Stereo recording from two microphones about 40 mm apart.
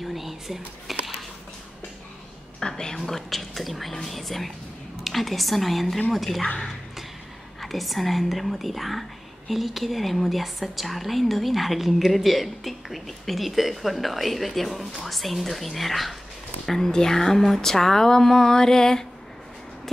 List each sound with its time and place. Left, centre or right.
0.0 s whispering: centre
2.6 s a sound: left
3.1 s a woman's voice: centre
7.6 s a woman's voice: centre